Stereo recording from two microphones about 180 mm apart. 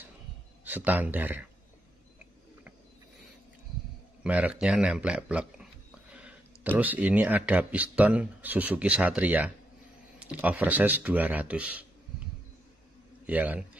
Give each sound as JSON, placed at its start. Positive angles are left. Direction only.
{"t": 0.7, "sound": "speech", "side_deg": -10}
{"t": 4.2, "sound": "a man's voice", "side_deg": -5}
{"t": 13.3, "sound": "speech", "side_deg": -10}